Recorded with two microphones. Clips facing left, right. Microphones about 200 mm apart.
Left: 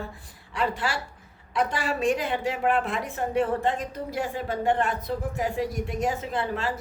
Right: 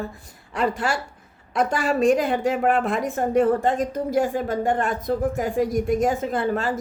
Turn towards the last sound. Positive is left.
turn(degrees=-45)  # may be behind; listen again after turning